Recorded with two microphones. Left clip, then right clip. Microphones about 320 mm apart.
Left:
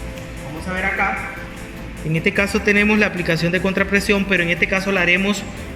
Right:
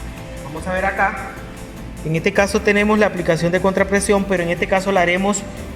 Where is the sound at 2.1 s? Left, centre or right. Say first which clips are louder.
Right 2 dB; right.